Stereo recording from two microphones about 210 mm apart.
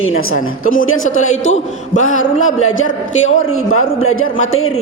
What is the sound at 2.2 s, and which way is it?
A man's voice, 70° left (ahead or behind).